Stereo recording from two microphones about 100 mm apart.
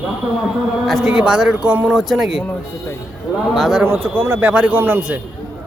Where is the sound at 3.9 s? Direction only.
20° right (ahead or behind).